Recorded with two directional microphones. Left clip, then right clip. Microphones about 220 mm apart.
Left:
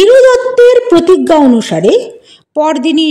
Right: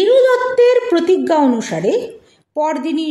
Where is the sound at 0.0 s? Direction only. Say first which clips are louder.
Left 7 dB; 35° left (ahead or behind).